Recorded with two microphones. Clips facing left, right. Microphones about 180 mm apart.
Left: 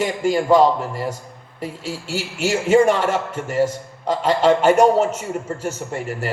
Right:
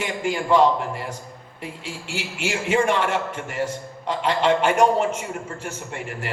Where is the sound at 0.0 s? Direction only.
40° left (ahead or behind).